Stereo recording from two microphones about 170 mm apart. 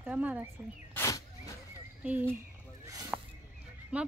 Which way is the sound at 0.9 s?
20° left (ahead or behind).